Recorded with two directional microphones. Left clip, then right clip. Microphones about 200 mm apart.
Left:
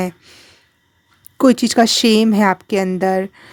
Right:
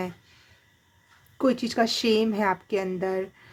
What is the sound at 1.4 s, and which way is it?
Speech, 50° left (ahead or behind).